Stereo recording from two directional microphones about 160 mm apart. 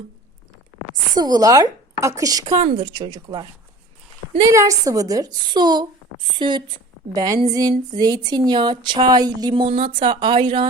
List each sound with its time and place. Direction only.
1.1 s speech: 25° right (ahead or behind)